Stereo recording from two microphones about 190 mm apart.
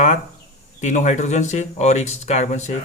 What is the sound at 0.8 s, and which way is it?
Speech, 40° left (ahead or behind).